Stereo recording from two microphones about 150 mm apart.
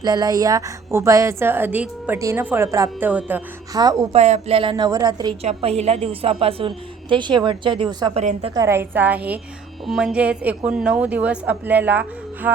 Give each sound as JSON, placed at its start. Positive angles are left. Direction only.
{"t": 0.0, "sound": "a woman's voice", "side_deg": -25}
{"t": 3.1, "sound": "a woman's voice", "side_deg": -10}
{"t": 3.8, "sound": "a woman's voice", "side_deg": -25}
{"t": 4.1, "sound": "a woman's voice", "side_deg": -45}
{"t": 5.4, "sound": "a woman's voice", "side_deg": -45}
{"t": 8.1, "sound": "a woman's voice", "side_deg": -55}
{"t": 8.5, "sound": "a woman's voice", "side_deg": -20}